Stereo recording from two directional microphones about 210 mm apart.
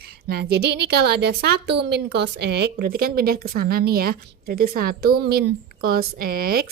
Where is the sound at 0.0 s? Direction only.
50° right (ahead or behind).